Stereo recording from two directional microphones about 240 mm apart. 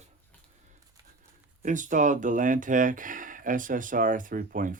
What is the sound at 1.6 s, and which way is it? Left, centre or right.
Speech, right.